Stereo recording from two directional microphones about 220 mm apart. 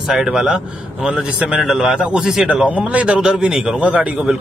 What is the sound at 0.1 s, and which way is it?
A man's voice, 5° right (ahead or behind).